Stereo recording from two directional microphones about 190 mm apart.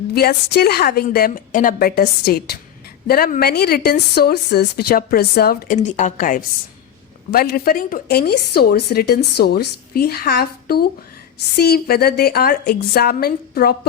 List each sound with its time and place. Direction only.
0.1 s a woman's voice: 55° left (ahead or behind)
7.3 s a woman's voice: 55° left (ahead or behind)